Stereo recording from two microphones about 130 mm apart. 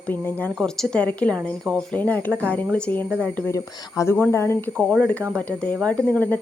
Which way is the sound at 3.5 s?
25° left (ahead or behind).